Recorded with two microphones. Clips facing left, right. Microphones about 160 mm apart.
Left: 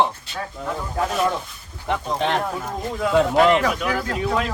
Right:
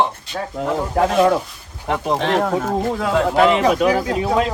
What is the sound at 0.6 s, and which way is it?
Speech, 90° right.